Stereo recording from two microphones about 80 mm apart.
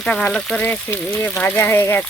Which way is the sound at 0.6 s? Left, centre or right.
Left.